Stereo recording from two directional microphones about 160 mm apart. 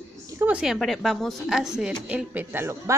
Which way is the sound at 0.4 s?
5° right (ahead or behind).